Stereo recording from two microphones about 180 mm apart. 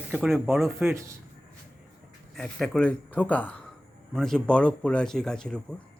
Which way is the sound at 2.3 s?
Centre (ahead or behind).